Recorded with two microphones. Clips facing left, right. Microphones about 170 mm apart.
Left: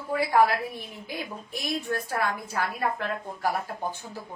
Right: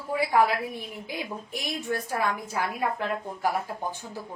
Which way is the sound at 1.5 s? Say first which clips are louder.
Left 1 dB; 15° right (ahead or behind).